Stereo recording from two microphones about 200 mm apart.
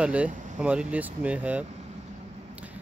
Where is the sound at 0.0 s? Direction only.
5° right (ahead or behind).